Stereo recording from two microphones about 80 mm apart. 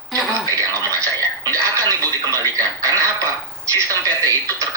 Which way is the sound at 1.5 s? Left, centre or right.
Right.